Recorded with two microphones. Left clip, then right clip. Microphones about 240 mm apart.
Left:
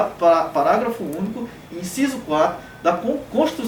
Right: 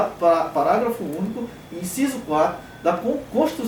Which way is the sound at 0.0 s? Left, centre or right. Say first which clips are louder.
Left 2 dB; centre.